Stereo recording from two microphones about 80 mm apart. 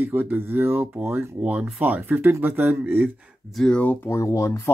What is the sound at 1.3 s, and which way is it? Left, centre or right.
Speech, centre.